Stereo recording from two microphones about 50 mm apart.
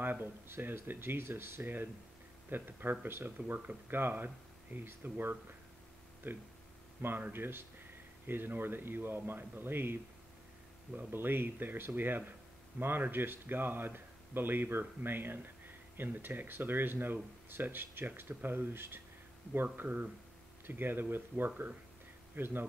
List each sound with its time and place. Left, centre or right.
0.0 s speech: right
3.3 s speech: right
11.1 s speech: right